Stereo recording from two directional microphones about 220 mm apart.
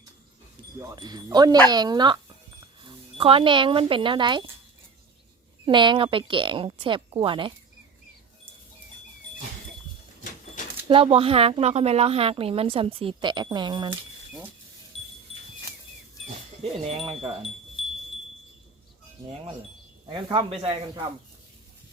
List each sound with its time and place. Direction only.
0.8 s speech: 15° right (ahead or behind)
5.6 s a woman's voice: 20° right (ahead or behind)
10.8 s a woman's voice: 25° right (ahead or behind)
17.1 s a woman's voice: 25° right (ahead or behind)
20.1 s a woman's voice: 20° right (ahead or behind)